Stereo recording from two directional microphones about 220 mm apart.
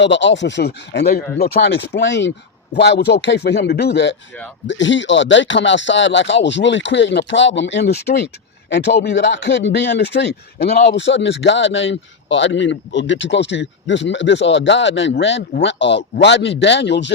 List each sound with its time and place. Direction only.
0.0 s a man's voice: 55° left (ahead or behind)